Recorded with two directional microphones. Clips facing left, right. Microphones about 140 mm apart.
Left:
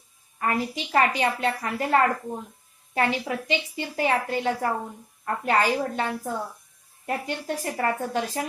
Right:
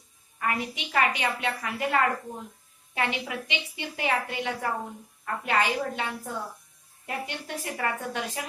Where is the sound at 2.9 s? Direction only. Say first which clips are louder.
Left 5 dB; 40° left (ahead or behind).